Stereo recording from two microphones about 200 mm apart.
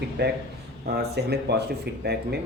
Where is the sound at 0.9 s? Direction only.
55° right (ahead or behind).